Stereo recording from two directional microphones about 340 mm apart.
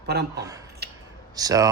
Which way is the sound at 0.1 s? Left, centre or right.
Right.